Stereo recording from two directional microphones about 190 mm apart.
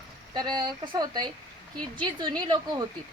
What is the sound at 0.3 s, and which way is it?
Speech, 25° right (ahead or behind).